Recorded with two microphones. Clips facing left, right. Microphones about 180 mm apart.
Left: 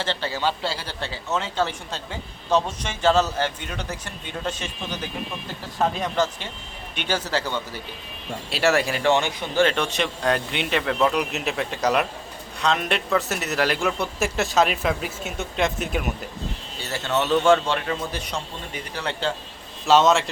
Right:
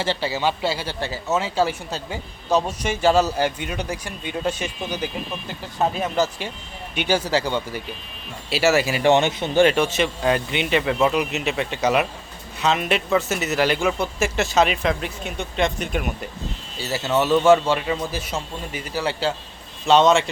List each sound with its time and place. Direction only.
0.0 s speech: 10° right (ahead or behind)
8.4 s speech: centre (ahead or behind)
9.0 s a man's voice: 20° right (ahead or behind)
9.7 s speech: 5° right (ahead or behind)